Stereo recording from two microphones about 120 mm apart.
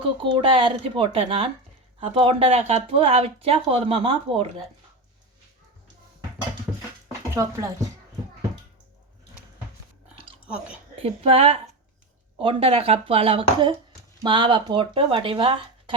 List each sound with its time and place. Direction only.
0.2 s speech: 45° right (ahead or behind)
7.3 s speech: 25° right (ahead or behind)
10.4 s speech: 10° right (ahead or behind)
11.0 s speech: 55° right (ahead or behind)
14.3 s speech: 40° right (ahead or behind)